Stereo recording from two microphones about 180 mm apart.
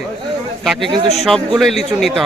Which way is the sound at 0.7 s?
Centre (ahead or behind).